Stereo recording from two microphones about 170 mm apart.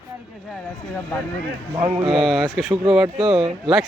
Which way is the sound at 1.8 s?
25° right (ahead or behind).